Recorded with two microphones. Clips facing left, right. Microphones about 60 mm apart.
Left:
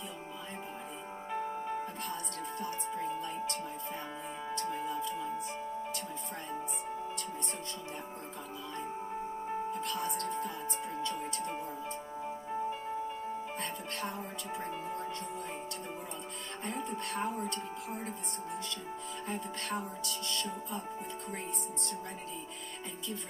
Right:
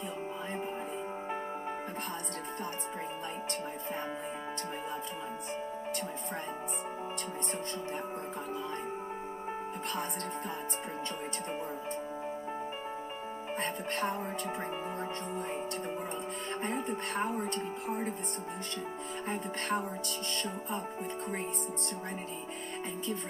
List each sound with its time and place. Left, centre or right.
13.6 s speech: right
16.6 s speech: right
19.2 s music: right